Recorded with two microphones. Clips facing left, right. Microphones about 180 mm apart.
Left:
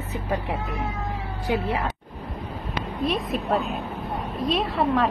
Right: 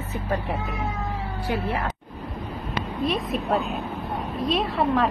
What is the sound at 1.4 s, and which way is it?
Speech, 20° left (ahead or behind).